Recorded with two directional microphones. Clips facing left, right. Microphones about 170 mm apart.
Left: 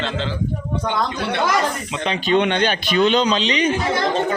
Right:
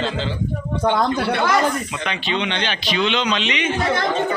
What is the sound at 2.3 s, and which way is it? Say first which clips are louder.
Speech: left 7 dB; 50° left (ahead or behind).